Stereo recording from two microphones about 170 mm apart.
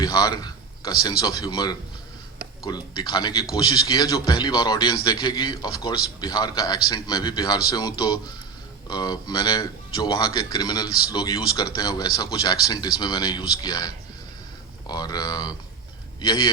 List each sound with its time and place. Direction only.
0.0 s a man's voice: 25° left (ahead or behind)